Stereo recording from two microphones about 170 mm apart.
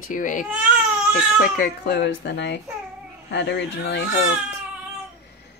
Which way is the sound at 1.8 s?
85° left.